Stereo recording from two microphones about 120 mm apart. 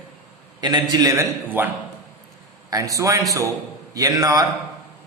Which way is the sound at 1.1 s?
15° right (ahead or behind).